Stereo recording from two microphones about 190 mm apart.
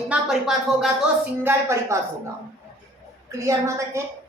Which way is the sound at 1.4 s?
15° right (ahead or behind).